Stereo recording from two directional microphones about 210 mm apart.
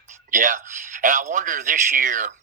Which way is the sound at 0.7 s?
35° right (ahead or behind).